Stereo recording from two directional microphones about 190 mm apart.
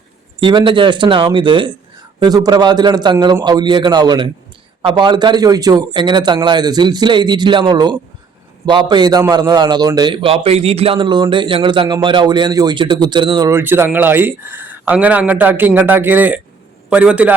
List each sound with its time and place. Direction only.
0.3 s a man's voice: 25° right (ahead or behind); by 17.3 s 5° right (ahead or behind)